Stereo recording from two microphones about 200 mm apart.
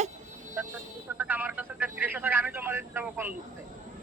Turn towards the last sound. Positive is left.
turn(degrees=-10)  # may be behind; listen again after turning